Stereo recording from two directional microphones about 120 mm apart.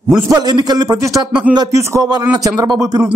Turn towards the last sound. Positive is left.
turn(degrees=-35)  # may be behind; listen again after turning